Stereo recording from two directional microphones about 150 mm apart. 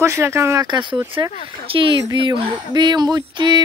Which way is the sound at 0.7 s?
30° right (ahead or behind).